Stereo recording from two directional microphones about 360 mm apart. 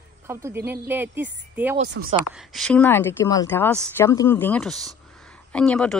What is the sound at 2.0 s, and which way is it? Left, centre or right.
Speech, right.